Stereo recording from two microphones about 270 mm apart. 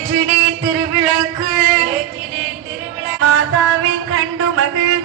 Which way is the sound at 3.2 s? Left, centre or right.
Right.